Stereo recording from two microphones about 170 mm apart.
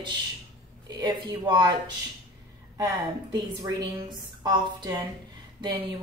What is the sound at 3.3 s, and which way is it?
A woman's voice, 25° right (ahead or behind).